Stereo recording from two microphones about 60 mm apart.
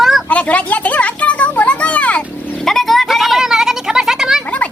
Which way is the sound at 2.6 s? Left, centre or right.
Centre.